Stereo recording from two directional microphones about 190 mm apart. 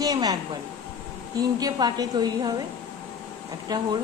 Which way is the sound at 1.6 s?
20° right (ahead or behind).